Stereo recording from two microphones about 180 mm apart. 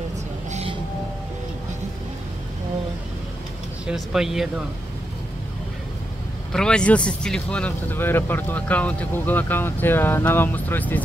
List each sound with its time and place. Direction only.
0.5 s music: 35° right (ahead or behind)
3.8 s speech: 5° right (ahead or behind)
6.5 s speech: 5° left (ahead or behind)